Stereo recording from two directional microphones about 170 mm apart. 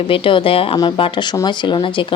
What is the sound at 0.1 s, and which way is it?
A woman's voice, 30° left (ahead or behind).